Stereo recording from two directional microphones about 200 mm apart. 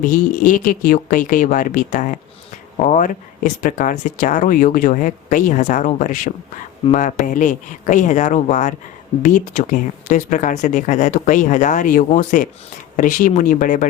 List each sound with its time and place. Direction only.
0.0 s speech: 40° left (ahead or behind)